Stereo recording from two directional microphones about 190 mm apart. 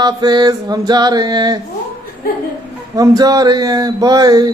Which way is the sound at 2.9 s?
20° right (ahead or behind).